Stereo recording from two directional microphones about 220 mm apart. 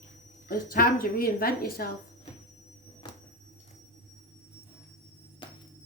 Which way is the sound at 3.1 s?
20° left (ahead or behind).